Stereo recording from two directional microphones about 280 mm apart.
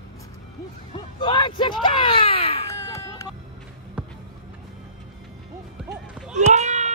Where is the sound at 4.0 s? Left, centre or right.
Centre.